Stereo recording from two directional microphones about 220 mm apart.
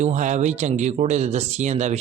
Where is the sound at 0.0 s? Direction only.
35° right (ahead or behind).